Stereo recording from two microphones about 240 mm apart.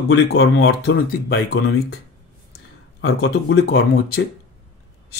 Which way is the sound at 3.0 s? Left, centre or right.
Left.